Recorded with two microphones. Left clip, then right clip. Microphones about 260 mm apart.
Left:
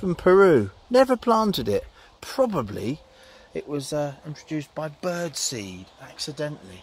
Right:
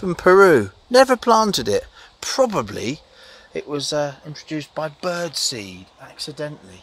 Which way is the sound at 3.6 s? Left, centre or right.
Right.